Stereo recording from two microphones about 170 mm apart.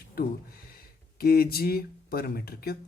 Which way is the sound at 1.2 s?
65° left (ahead or behind).